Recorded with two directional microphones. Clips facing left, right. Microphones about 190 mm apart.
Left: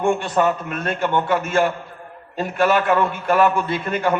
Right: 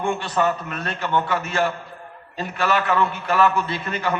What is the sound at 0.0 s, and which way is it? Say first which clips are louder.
A man's voice: left 3 dB; 50° left (ahead or behind).